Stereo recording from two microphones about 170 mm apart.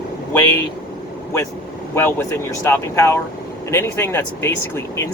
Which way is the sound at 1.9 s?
15° left (ahead or behind).